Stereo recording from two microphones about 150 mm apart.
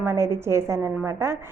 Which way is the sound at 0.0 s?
20° right (ahead or behind).